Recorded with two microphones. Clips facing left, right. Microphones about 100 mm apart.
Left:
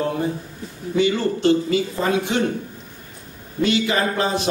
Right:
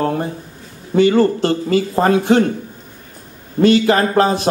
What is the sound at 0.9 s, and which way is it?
A man's voice, 50° right (ahead or behind).